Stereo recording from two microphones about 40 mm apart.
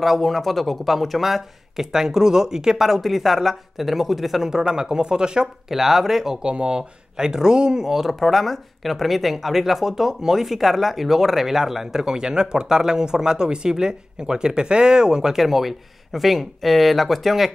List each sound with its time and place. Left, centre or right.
0.0 s speech: centre
4.5 s speech: centre
5.7 s speech: centre
6.4 s speech: right; by 17.5 s centre